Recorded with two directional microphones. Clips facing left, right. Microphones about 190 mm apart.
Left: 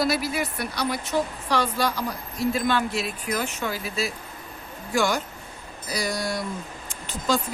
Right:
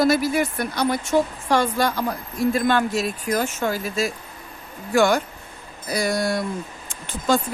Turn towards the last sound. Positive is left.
turn(degrees=-55)  # may be behind; listen again after turning